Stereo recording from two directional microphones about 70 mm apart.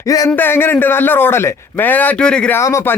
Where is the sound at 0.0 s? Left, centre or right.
Left.